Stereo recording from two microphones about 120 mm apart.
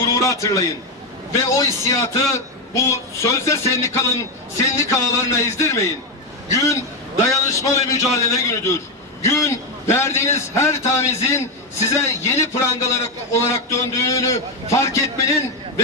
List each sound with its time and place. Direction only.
0.0 s a man's voice: 30° left (ahead or behind)